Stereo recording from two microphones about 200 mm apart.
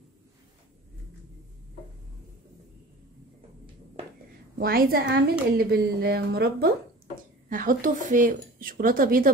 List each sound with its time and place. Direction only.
4.6 s speech: 50° right (ahead or behind)